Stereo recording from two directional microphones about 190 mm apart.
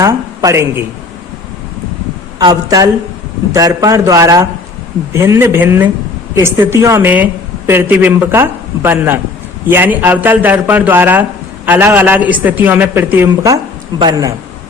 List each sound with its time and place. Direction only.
0.0 s a man's voice: 15° right (ahead or behind)
2.4 s a woman's voice: 20° right (ahead or behind)